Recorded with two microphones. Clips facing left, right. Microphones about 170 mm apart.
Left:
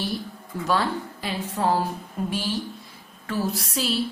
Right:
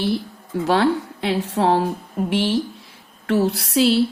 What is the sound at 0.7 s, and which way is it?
A woman's voice, 75° right (ahead or behind).